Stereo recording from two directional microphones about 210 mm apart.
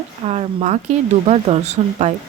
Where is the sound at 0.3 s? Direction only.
30° right (ahead or behind).